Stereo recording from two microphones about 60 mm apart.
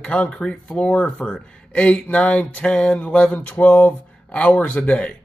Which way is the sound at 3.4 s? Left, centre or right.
Left.